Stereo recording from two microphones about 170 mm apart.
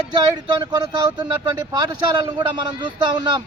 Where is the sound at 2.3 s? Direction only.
25° right (ahead or behind).